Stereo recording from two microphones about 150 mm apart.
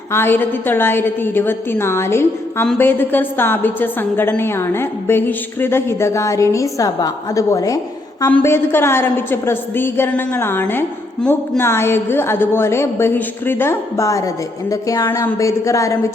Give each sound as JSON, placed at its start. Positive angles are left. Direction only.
{"t": 0.1, "sound": "a woman's voice", "side_deg": 15}